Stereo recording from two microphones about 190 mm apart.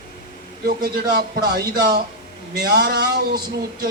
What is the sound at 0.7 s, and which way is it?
Speech, 55° right (ahead or behind).